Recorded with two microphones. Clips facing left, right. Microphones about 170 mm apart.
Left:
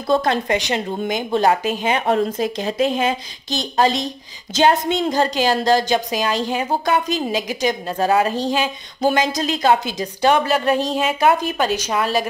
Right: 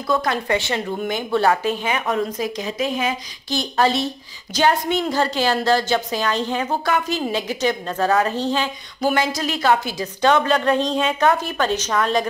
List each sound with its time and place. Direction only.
0.1 s a woman's voice: 30° left (ahead or behind)
1.9 s a woman's voice: 30° left (ahead or behind); by 12.3 s 5° left (ahead or behind)